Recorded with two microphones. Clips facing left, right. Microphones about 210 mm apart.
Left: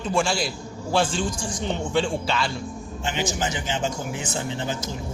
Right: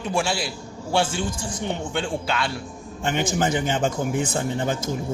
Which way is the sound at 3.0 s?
55° right (ahead or behind).